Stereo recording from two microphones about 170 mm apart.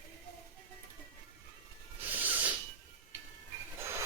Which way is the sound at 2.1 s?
10° right (ahead or behind).